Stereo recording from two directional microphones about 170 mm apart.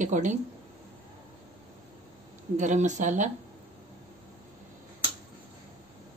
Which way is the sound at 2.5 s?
45° right (ahead or behind).